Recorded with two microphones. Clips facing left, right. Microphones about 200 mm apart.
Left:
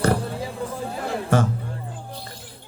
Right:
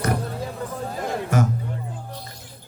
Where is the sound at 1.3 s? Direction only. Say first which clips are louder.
Left 2 dB; 30° left (ahead or behind).